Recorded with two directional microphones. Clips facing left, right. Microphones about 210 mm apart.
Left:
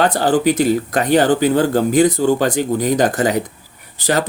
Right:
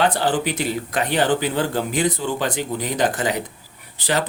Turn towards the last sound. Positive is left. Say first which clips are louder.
# left 5 dB
turn(degrees=40)  # may be behind; listen again after turning